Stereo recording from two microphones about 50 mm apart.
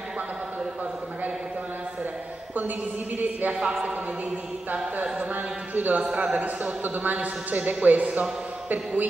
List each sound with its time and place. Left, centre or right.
3.2 s a man's voice: right
3.5 s a man's voice: centre
5.3 s a man's voice: right